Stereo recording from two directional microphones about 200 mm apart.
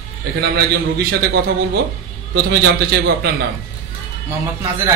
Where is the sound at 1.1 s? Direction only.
55° right (ahead or behind).